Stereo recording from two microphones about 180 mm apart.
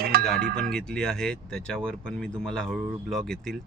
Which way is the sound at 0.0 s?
60° right (ahead or behind).